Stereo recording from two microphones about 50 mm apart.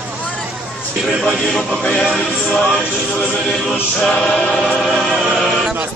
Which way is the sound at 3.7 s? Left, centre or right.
Centre.